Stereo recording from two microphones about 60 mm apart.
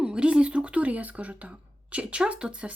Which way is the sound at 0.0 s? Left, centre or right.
Centre.